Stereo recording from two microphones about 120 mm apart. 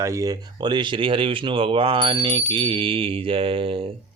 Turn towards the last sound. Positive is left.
turn(degrees=-50)  # may be behind; listen again after turning